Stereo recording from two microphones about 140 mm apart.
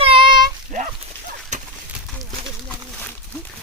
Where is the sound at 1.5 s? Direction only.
55° right (ahead or behind).